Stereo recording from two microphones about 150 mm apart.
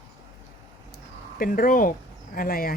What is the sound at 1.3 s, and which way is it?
Speech, 70° left (ahead or behind).